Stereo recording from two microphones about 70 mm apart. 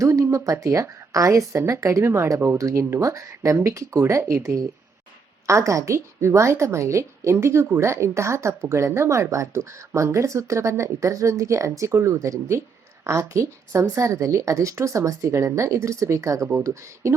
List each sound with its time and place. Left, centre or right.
0.0 s speech: right